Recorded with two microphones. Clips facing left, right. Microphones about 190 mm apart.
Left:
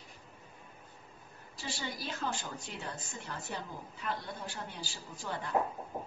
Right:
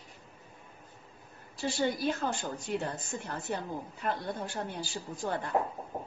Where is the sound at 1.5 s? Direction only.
50° right (ahead or behind).